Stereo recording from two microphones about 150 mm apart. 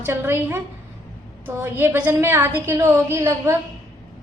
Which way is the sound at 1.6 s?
15° right (ahead or behind).